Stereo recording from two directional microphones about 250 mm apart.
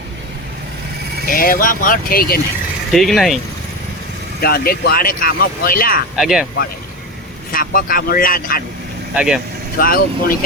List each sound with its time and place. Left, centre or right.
1.3 s speech: left
2.9 s speech: centre
4.4 s speech: left
6.1 s speech: centre
7.5 s speech: left
9.1 s speech: centre
9.7 s speech: left